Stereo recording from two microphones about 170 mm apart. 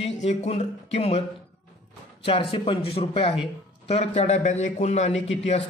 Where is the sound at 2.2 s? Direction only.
30° left (ahead or behind).